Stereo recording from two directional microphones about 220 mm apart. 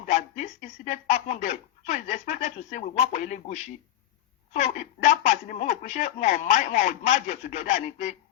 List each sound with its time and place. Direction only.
0.1 s speech: 35° left (ahead or behind)